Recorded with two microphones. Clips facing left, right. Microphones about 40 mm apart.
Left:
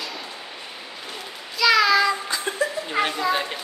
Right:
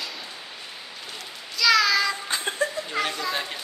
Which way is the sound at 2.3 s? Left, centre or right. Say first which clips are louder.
Left 1 dB; right.